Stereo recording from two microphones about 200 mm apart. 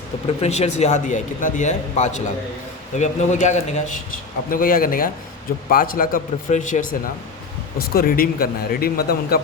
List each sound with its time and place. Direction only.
0.4 s a man's voice: 35° left (ahead or behind)
7.9 s speech: 45° left (ahead or behind)